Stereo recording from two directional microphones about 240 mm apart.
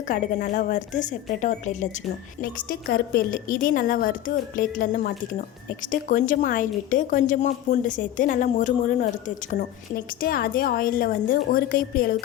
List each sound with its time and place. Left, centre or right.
0.1 s a woman's voice: left